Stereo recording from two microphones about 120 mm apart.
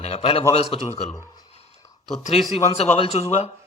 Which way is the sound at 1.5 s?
60° left (ahead or behind).